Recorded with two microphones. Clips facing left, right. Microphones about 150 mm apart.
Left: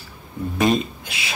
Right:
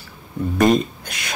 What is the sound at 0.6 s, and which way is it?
Speech, centre (ahead or behind).